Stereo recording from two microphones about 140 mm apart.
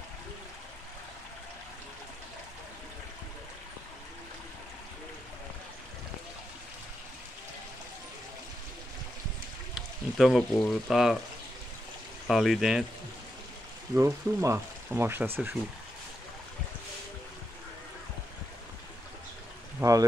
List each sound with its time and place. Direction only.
9.8 s speech: centre (ahead or behind)
12.3 s speech: centre (ahead or behind)
13.9 s speech: 20° right (ahead or behind)
19.8 s speech: 25° right (ahead or behind)